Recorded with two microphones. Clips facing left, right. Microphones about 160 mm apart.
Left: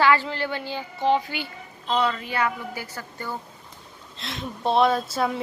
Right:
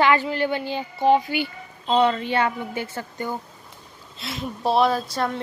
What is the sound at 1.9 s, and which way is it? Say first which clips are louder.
A woman's voice: right 5 dB; 25° right (ahead or behind).